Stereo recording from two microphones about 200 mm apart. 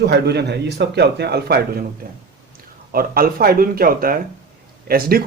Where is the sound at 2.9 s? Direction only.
45° right (ahead or behind).